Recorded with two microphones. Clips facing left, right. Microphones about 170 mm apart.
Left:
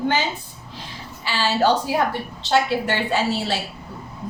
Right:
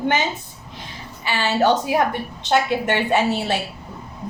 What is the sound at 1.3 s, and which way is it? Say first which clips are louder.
A woman's voice: right 1 dB; 20° right (ahead or behind).